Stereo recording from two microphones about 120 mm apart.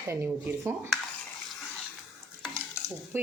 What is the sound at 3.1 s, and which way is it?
Speech, 15° right (ahead or behind).